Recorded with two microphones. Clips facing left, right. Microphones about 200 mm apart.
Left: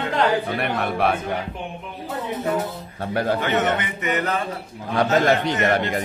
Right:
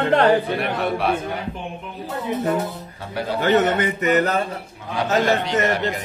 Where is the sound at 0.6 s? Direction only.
55° left (ahead or behind).